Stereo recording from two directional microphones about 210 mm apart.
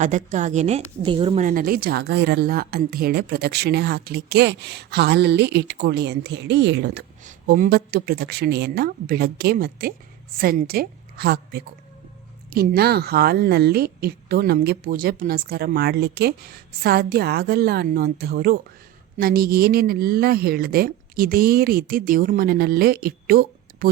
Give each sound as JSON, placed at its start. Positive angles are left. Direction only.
{"t": 0.0, "sound": "speech", "side_deg": -35}
{"t": 1.5, "sound": "speech", "side_deg": -40}